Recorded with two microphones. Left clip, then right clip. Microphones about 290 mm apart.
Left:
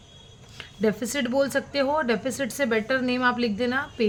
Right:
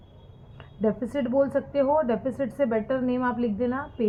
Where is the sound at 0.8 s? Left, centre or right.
Left.